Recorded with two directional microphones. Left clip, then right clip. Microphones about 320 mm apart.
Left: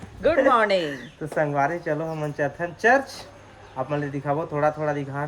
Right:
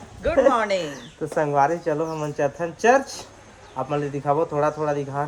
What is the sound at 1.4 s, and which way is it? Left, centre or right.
Speech, centre.